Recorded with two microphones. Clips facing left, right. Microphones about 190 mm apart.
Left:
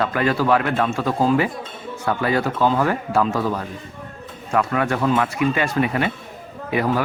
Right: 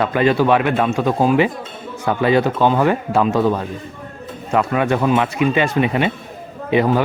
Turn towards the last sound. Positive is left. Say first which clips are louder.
# right 5 dB
turn(degrees=-25)  # may be behind; listen again after turning